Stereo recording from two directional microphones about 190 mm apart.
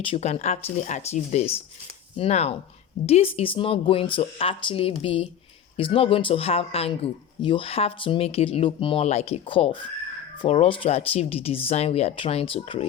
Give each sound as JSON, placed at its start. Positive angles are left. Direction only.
{"t": 0.0, "sound": "speech", "side_deg": 30}